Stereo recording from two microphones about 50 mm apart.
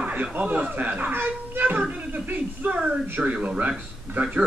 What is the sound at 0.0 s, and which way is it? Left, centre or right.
A child's voice, right.